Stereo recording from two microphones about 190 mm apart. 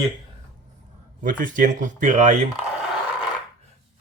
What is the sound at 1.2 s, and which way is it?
Speech, 45° right (ahead or behind).